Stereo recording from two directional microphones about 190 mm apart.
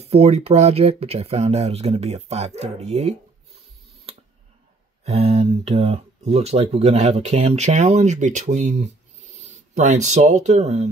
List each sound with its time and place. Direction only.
0.0 s speech: 35° right (ahead or behind)
5.0 s speech: 35° right (ahead or behind)